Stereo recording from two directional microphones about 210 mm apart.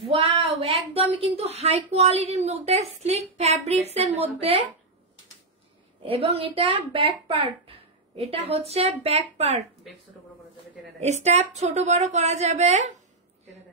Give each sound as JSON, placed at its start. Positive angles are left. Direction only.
{"t": 0.3, "sound": "a woman's voice", "side_deg": -25}
{"t": 6.0, "sound": "a woman's voice", "side_deg": -25}
{"t": 11.0, "sound": "speech", "side_deg": -35}